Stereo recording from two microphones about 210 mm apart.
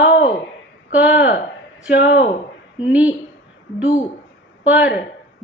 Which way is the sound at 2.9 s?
5° right (ahead or behind).